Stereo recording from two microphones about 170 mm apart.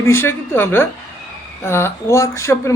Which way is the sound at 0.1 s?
15° left (ahead or behind).